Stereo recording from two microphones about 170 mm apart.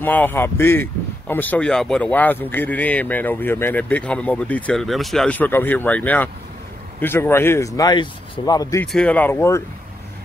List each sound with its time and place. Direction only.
0.0 s speech: 10° left (ahead or behind)
8.8 s speech: 5° left (ahead or behind)